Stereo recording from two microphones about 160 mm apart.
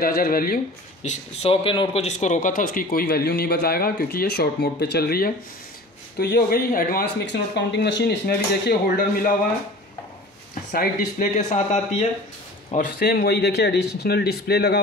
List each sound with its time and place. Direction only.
0.0 s a man's voice: 70° left (ahead or behind)
1.0 s a man's voice: 45° left (ahead or behind); by 7.1 s 65° left (ahead or behind)
7.5 s speech: 90° left; by 9.3 s 75° left (ahead or behind)
10.7 s speech: 60° left (ahead or behind)
12.7 s a man's voice: 65° left (ahead or behind); by 14.8 s 90° left